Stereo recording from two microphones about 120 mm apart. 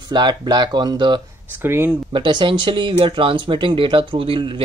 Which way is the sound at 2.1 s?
45° right (ahead or behind).